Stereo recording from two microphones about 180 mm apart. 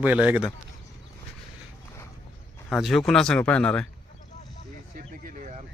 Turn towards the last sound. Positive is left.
turn(degrees=-45)  # may be behind; listen again after turning